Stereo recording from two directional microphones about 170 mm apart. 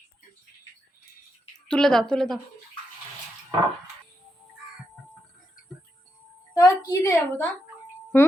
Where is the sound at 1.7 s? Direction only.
5° left (ahead or behind).